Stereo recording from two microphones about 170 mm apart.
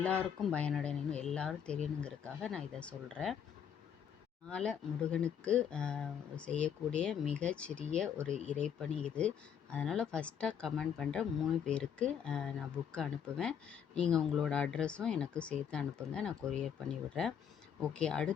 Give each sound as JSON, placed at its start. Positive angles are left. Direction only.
{"t": 0.0, "sound": "speech", "side_deg": 5}
{"t": 4.4, "sound": "speech", "side_deg": 5}